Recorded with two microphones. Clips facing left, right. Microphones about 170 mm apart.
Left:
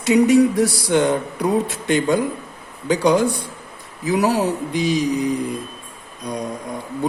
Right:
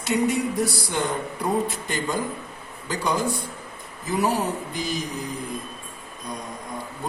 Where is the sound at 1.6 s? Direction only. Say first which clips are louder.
Left 8 dB; 75° left (ahead or behind).